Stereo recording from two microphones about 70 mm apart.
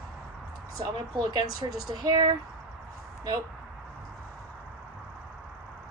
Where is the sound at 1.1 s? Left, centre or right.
Right.